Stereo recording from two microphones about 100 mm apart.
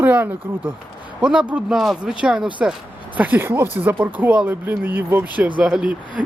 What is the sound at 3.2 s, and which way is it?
Speech, 20° right (ahead or behind).